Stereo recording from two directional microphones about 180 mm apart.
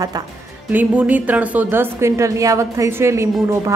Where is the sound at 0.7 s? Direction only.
10° right (ahead or behind).